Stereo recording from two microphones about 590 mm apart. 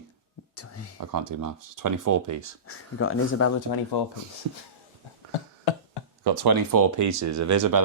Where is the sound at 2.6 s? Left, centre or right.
Left.